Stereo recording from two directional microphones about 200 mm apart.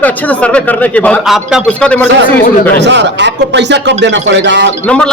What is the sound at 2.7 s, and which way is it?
A man's voice, 60° right (ahead or behind).